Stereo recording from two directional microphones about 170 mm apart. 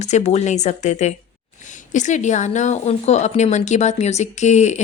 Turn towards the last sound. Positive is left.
turn(degrees=45)  # may be behind; listen again after turning